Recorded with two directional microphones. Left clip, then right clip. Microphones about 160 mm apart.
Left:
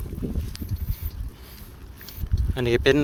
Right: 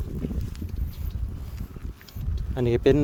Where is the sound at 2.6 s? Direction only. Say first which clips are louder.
Left 1 dB; 5° right (ahead or behind).